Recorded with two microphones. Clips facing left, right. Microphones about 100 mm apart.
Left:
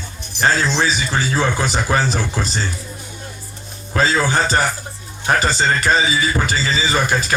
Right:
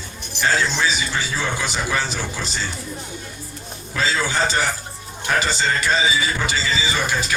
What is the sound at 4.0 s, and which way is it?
Speech, 45° left (ahead or behind).